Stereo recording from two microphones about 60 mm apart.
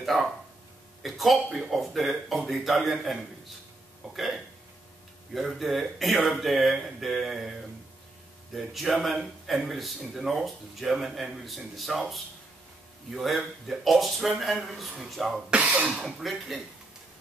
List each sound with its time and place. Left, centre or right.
0.0 s speech: centre
8.5 s speech: centre
15.5 s cough: right
15.9 s speech: centre